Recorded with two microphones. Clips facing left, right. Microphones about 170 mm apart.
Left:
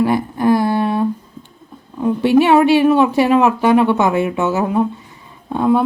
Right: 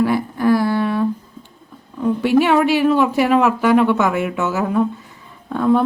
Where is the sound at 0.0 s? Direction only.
20° left (ahead or behind).